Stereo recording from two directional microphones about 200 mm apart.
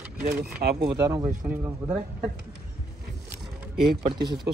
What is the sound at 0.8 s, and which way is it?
Speech, 20° right (ahead or behind).